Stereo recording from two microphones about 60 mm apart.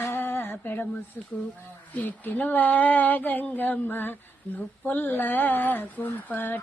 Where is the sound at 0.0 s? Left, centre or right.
Left.